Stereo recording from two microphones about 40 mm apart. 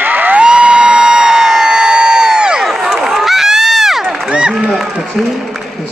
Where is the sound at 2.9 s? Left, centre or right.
Centre.